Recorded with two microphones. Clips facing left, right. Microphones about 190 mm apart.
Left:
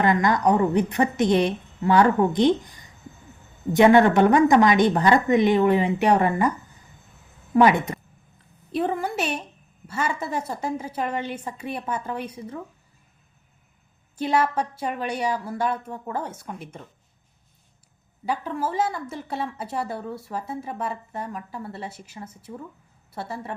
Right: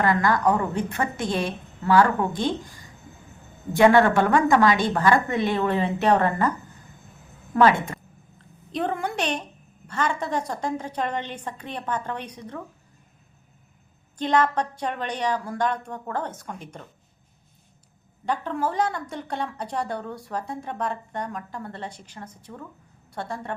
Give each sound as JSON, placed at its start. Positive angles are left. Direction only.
{"t": 0.0, "sound": "a woman's voice", "side_deg": 20}
{"t": 7.5, "sound": "a woman's voice", "side_deg": 15}
{"t": 8.7, "sound": "a woman's voice", "side_deg": 5}
{"t": 14.2, "sound": "a woman's voice", "side_deg": 10}
{"t": 18.3, "sound": "a woman's voice", "side_deg": 5}